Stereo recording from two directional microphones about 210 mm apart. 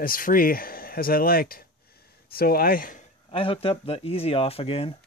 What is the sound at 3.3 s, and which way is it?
Speech, 25° left (ahead or behind).